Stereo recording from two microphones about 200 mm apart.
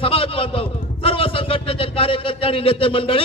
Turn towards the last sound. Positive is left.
turn(degrees=25)  # may be behind; listen again after turning